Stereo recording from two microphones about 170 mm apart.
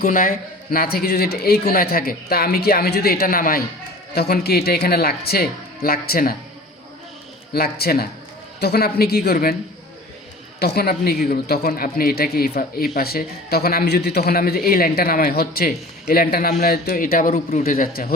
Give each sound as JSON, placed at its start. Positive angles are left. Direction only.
{"t": 0.0, "sound": "a man's voice", "side_deg": 55}
{"t": 4.1, "sound": "speech", "side_deg": 70}
{"t": 7.5, "sound": "a man's voice", "side_deg": 65}
{"t": 10.6, "sound": "a man's voice", "side_deg": 70}